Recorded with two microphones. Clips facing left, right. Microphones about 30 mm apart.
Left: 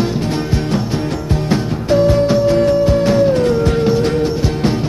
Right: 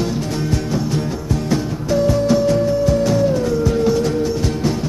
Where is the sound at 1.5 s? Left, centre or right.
Left.